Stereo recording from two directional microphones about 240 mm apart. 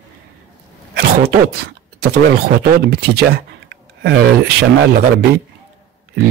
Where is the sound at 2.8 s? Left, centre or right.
Right.